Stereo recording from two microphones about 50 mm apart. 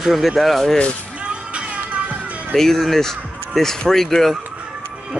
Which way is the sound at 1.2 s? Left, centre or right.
Right.